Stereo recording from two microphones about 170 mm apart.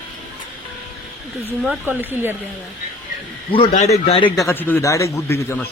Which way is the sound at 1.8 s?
10° right (ahead or behind).